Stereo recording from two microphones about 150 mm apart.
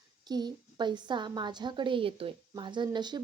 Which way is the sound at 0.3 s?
30° right (ahead or behind).